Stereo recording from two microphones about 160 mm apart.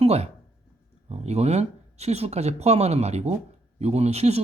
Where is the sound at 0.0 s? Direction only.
40° right (ahead or behind).